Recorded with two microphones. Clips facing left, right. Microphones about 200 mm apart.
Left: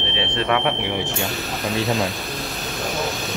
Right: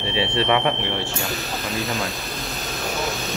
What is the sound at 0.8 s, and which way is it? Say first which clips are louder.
Speech: left 2 dB; 15° left (ahead or behind).